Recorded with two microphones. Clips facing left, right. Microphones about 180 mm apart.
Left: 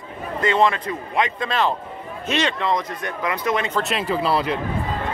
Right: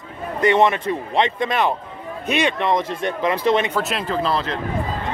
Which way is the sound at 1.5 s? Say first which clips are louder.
Right 1 dB; 15° right (ahead or behind).